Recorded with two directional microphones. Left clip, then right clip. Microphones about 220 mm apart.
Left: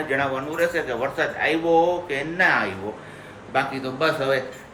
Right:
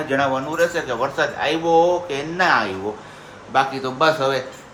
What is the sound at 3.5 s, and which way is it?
Speech, 20° right (ahead or behind).